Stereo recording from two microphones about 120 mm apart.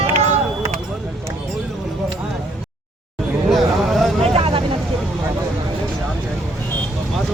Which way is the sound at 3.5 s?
Centre (ahead or behind).